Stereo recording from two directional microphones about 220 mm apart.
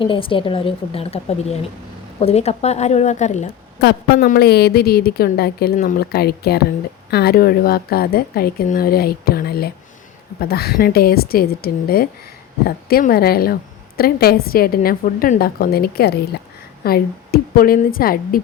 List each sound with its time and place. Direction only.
0.0 s a woman's voice: 25° left (ahead or behind)
3.8 s a woman's voice: 45° left (ahead or behind)